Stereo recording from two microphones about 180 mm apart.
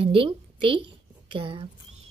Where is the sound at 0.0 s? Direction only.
30° right (ahead or behind).